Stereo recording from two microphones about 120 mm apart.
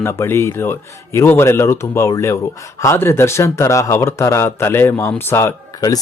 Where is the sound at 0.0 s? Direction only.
20° left (ahead or behind).